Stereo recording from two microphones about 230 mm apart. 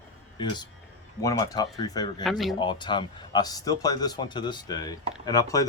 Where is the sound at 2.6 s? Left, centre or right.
Centre.